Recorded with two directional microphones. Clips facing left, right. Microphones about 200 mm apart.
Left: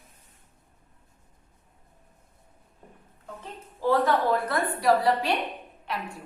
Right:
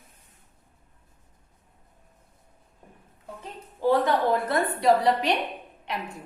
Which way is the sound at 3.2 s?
15° right (ahead or behind).